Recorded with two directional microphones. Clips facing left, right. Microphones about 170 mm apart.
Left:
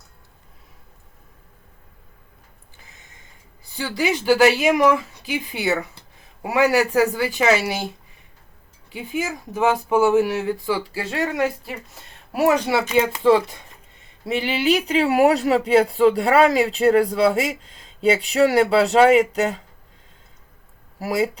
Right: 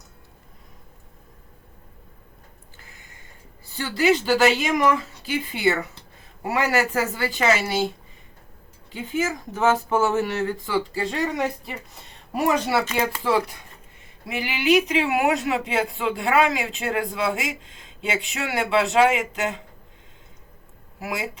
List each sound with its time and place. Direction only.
2.7 s a sound: 20° left (ahead or behind)
3.8 s speech: 15° left (ahead or behind)
8.9 s speech: 10° left (ahead or behind)
14.3 s speech: 30° left (ahead or behind)
21.0 s speech: 35° left (ahead or behind)